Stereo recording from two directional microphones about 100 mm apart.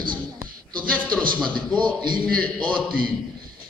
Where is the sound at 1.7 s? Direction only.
50° right (ahead or behind).